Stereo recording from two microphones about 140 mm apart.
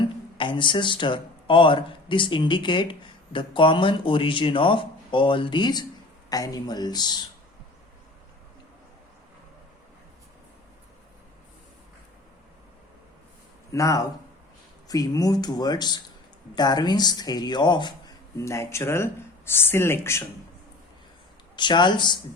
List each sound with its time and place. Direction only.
0.0 s a man's voice: 35° left (ahead or behind)
13.7 s speech: 25° left (ahead or behind)
18.3 s speech: 20° left (ahead or behind)
21.5 s a man's voice: 35° left (ahead or behind)